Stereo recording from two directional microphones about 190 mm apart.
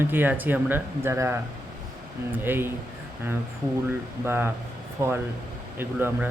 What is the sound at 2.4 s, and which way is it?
Speech, 10° right (ahead or behind).